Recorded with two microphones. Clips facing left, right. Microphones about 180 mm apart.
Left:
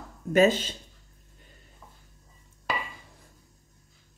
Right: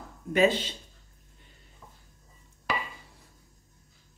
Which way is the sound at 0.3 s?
45° left (ahead or behind).